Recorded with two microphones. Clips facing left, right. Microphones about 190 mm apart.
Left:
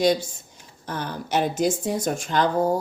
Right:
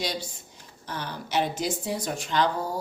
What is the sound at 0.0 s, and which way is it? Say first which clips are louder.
Speech: left 11 dB; 50° left (ahead or behind).